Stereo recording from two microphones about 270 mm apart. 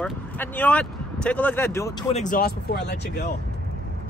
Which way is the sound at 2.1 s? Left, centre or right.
Left.